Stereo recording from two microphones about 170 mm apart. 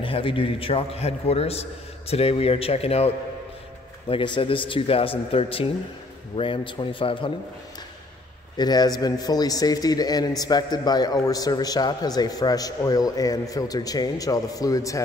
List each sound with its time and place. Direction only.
0.0 s a man's voice: 30° left (ahead or behind)
4.1 s a man's voice: 30° left (ahead or behind)
8.5 s a man's voice: 25° left (ahead or behind)